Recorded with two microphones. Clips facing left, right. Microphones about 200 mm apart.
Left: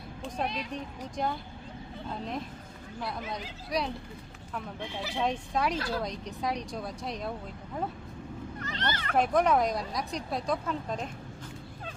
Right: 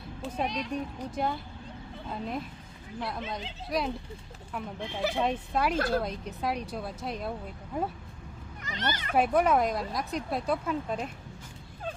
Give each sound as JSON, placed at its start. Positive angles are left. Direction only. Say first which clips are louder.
{"t": 0.2, "sound": "a child's voice", "louder": "right 2 dB", "side_deg": -5}
{"t": 3.7, "sound": "speech", "louder": "right 1 dB", "side_deg": 0}
{"t": 5.2, "sound": "speech", "louder": "left 2 dB", "side_deg": -5}
{"t": 5.7, "sound": "speech", "louder": "right 5 dB", "side_deg": -50}
{"t": 6.0, "sound": "speech", "louder": "right 1 dB", "side_deg": -5}
{"t": 8.6, "sound": "speech", "louder": "right 1 dB", "side_deg": -15}